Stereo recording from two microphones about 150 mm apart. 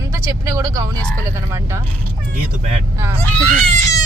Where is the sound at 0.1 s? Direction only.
20° right (ahead or behind).